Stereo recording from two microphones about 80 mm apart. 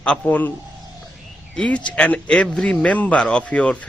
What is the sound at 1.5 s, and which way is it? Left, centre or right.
Speech, centre.